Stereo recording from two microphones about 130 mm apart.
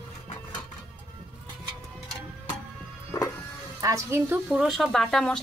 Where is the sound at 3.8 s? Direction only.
20° right (ahead or behind).